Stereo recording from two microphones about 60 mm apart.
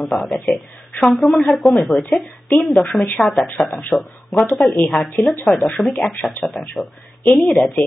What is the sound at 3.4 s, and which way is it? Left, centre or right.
Speech, left.